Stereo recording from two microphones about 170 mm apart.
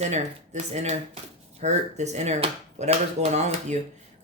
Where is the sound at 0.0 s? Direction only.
40° right (ahead or behind).